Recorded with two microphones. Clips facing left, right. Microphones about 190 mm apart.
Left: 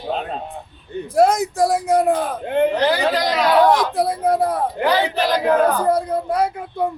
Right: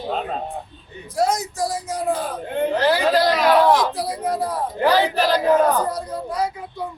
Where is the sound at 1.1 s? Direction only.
60° left (ahead or behind).